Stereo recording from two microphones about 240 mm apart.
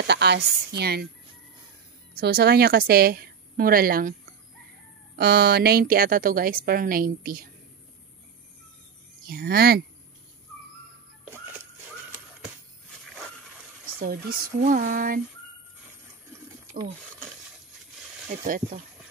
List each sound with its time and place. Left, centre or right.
0.0 s a woman's voice: right
2.1 s a woman's voice: right
5.1 s a woman's voice: right
9.2 s a woman's voice: right
13.9 s a woman's voice: right
18.3 s a woman's voice: right